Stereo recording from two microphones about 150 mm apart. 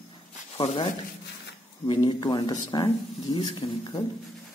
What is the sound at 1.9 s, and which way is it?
A man's voice, 30° left (ahead or behind).